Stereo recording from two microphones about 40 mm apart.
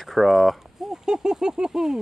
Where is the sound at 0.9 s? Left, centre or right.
Centre.